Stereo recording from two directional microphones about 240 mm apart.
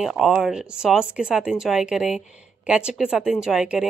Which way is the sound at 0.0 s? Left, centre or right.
Centre.